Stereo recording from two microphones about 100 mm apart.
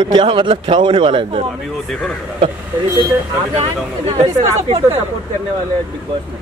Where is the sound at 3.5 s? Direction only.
85° right.